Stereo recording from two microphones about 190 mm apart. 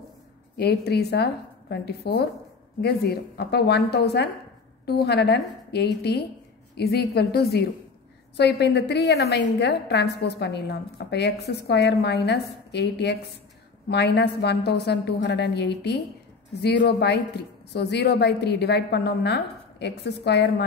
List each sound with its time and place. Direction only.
0.6 s a woman's voice: 55° left (ahead or behind)